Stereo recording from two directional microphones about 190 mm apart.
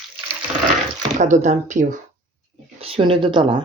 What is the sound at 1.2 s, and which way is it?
Speech, 40° right (ahead or behind).